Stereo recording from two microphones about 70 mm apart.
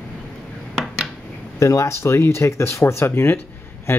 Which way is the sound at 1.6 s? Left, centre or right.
Left.